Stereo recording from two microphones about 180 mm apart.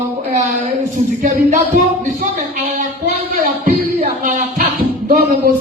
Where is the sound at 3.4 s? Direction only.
50° right (ahead or behind).